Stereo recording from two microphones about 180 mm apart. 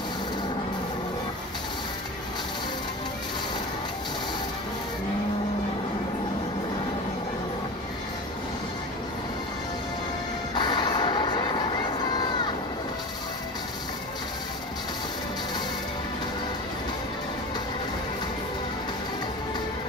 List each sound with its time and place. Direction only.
10.5 s music: 25° left (ahead or behind)